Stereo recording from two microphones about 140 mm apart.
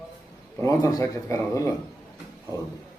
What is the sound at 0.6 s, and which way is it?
A man's voice, 25° left (ahead or behind).